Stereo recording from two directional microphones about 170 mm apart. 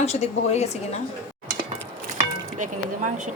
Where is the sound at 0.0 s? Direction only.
40° left (ahead or behind).